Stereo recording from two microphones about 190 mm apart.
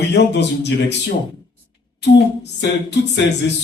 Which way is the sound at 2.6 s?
65° left (ahead or behind).